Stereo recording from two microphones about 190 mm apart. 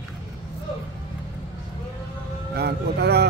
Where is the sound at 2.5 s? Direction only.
60° right (ahead or behind).